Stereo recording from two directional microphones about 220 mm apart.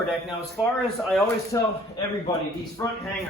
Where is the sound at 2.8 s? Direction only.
15° left (ahead or behind).